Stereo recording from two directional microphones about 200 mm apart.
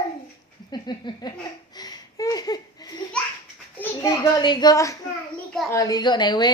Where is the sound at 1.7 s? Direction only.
20° left (ahead or behind).